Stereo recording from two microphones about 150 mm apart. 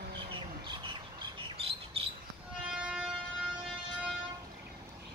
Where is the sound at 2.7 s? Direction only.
5° right (ahead or behind).